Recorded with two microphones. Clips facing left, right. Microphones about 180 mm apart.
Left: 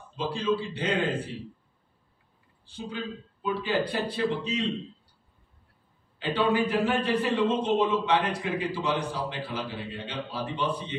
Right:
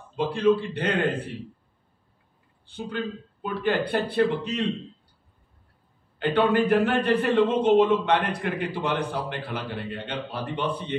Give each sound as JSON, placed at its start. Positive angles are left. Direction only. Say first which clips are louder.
{"t": 0.1, "sound": "a man's voice", "louder": "right 6 dB", "side_deg": -60}
{"t": 2.7, "sound": "a man's voice", "louder": "right 4 dB", "side_deg": -60}
{"t": 6.1, "sound": "a man's voice", "louder": "right 4 dB", "side_deg": -60}